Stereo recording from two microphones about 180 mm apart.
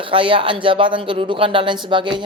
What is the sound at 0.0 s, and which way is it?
Speech, 30° right (ahead or behind).